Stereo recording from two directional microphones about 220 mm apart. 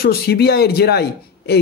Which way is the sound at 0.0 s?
45° left (ahead or behind).